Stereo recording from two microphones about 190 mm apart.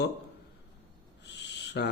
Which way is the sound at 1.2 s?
65° left (ahead or behind).